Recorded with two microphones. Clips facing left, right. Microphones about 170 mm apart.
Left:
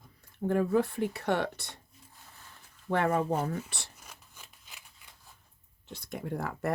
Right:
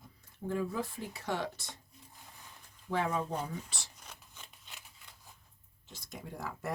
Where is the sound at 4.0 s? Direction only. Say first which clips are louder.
Even; 10° left (ahead or behind).